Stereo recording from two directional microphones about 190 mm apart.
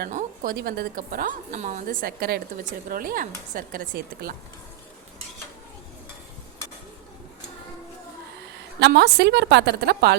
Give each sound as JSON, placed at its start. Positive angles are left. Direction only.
{"t": 0.0, "sound": "a woman's voice", "side_deg": -45}
{"t": 0.5, "sound": "a woman's voice", "side_deg": -55}
{"t": 8.8, "sound": "a woman's voice", "side_deg": -60}